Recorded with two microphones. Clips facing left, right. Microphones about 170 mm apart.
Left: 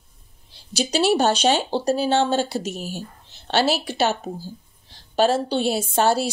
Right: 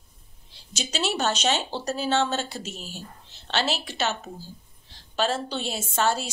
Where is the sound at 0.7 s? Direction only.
35° left (ahead or behind).